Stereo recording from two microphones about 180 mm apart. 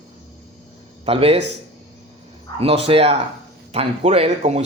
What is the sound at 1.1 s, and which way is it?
Speech, 35° right (ahead or behind).